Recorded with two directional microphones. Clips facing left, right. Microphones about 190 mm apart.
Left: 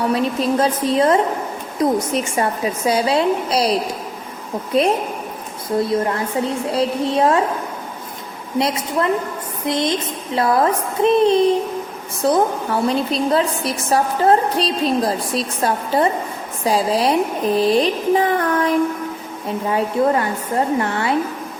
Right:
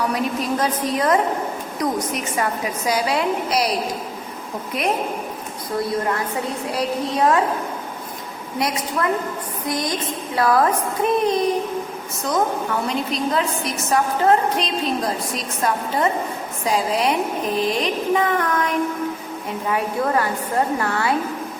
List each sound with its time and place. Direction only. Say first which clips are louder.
0.0 s speech: left 4 dB; 25° left (ahead or behind)
6.7 s speech: left 4 dB; 25° left (ahead or behind)
8.5 s a woman's voice: left 4 dB; 25° left (ahead or behind)